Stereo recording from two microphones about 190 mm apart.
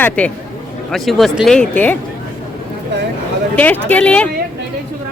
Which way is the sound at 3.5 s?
10° left (ahead or behind).